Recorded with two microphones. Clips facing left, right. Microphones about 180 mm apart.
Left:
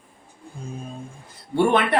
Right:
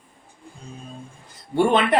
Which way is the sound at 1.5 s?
20° right (ahead or behind).